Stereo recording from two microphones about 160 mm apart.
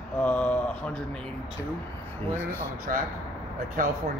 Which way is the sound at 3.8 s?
60° right (ahead or behind).